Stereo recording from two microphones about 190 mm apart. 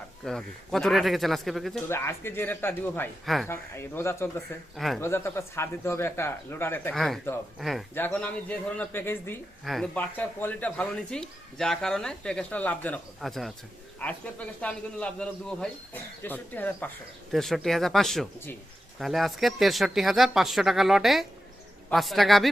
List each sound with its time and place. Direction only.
0.3 s speech: 5° left (ahead or behind)
1.9 s a man's voice: 10° left (ahead or behind)